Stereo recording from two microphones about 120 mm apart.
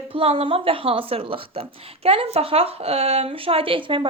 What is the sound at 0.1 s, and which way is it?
A woman's voice, 50° right (ahead or behind).